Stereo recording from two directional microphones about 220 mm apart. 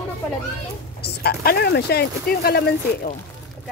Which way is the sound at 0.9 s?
45° left (ahead or behind).